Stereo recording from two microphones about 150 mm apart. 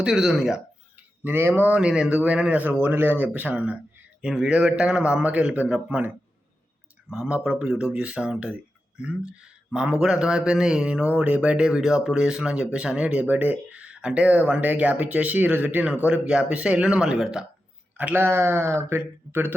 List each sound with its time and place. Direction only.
0.0 s a man's voice: 5° right (ahead or behind)
7.1 s a man's voice: 5° right (ahead or behind)